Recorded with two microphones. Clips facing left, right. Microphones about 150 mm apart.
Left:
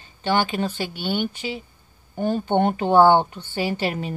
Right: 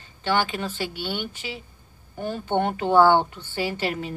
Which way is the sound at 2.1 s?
25° left (ahead or behind).